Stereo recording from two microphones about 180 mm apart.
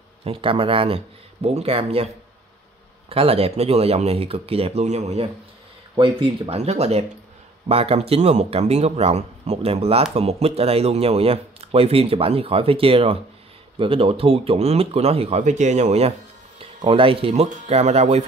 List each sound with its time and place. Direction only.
0.2 s speech: 30° right (ahead or behind)
3.1 s speech: 30° right (ahead or behind)